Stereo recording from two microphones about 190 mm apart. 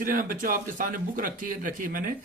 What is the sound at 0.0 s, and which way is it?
Speech, 45° right (ahead or behind).